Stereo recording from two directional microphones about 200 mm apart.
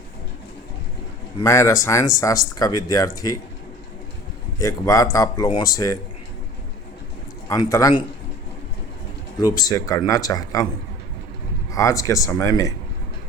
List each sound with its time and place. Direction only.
1.4 s speech: 15° left (ahead or behind)
4.6 s speech: 15° left (ahead or behind)
7.4 s a man's voice: 15° left (ahead or behind)
9.4 s speech: 20° left (ahead or behind)
11.7 s speech: 15° left (ahead or behind)